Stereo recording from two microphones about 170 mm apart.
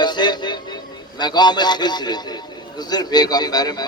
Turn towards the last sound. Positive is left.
turn(degrees=25)  # may be behind; listen again after turning